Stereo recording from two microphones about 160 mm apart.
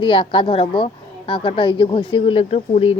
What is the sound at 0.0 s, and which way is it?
Speech, 30° left (ahead or behind).